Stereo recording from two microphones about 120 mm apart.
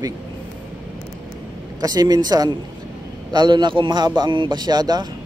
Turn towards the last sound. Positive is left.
turn(degrees=-35)  # may be behind; listen again after turning